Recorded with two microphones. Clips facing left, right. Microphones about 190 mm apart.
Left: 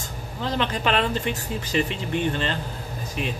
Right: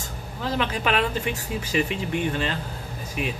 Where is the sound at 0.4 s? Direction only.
5° right (ahead or behind).